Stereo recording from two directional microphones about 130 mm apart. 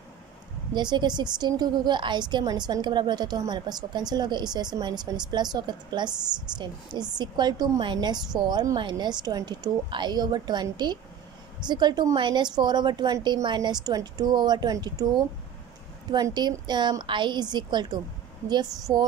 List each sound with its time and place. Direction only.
0.7 s a woman's voice: 35° right (ahead or behind)